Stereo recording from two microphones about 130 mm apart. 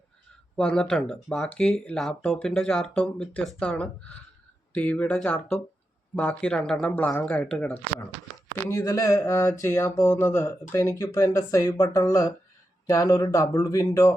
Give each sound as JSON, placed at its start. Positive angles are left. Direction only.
{"t": 0.5, "sound": "speech", "side_deg": 5}
{"t": 8.7, "sound": "speech", "side_deg": 30}